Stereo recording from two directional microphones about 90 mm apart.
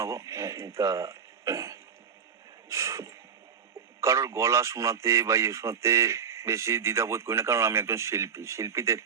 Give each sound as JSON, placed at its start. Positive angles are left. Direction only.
{"t": 0.0, "sound": "speech", "side_deg": -35}
{"t": 2.6, "sound": "a sound", "side_deg": -35}
{"t": 4.0, "sound": "a man's voice", "side_deg": -35}